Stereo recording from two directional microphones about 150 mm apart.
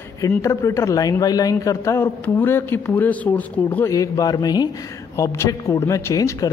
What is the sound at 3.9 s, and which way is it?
Speech, 20° left (ahead or behind).